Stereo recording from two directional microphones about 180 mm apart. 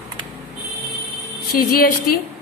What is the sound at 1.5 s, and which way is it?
Speech, 55° left (ahead or behind).